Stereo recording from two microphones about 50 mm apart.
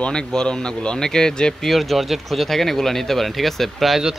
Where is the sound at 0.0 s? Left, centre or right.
Centre.